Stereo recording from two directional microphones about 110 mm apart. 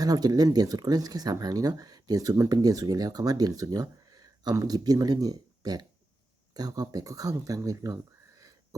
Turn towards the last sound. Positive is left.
turn(degrees=-30)  # may be behind; listen again after turning